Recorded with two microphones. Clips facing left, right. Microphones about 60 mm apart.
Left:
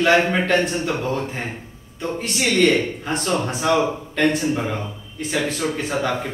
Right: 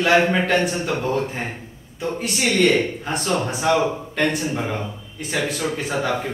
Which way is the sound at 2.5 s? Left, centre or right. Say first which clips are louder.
Even; centre.